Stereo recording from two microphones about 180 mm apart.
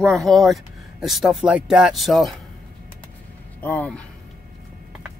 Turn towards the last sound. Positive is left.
turn(degrees=10)  # may be behind; listen again after turning